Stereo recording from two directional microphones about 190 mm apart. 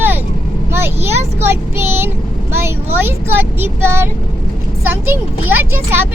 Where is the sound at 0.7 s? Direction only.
10° right (ahead or behind).